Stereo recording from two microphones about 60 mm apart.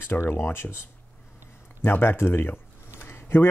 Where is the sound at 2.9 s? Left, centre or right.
Left.